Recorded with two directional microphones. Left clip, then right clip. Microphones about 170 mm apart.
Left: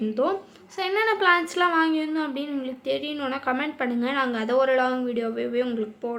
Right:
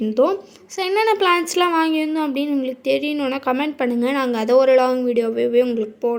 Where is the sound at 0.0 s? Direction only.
30° right (ahead or behind).